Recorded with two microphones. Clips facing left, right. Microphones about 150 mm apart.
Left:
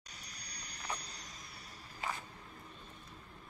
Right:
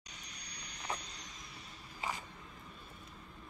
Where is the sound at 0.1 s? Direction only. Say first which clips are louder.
Even; 35° left (ahead or behind).